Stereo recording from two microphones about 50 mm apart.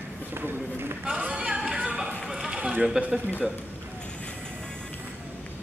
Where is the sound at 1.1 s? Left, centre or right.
Centre.